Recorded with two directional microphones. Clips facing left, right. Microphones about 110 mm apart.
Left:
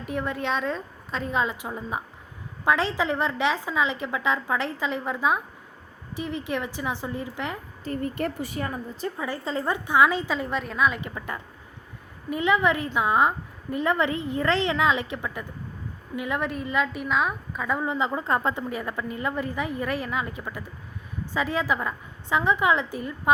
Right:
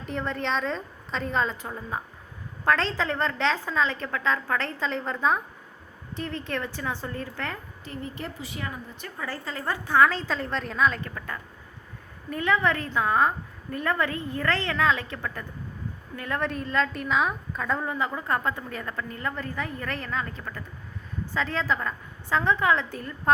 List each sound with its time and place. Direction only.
0.0 s a woman's voice: 10° left (ahead or behind)
7.9 s a woman's voice: 55° left (ahead or behind); by 9.0 s 40° left (ahead or behind)
9.0 s a woman's voice: 15° left (ahead or behind)
17.8 s a woman's voice: 20° left (ahead or behind)